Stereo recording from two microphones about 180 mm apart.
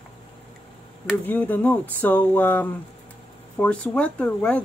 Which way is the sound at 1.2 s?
10° left (ahead or behind).